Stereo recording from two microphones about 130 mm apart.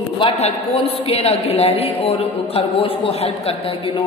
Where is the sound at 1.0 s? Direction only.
55° left (ahead or behind).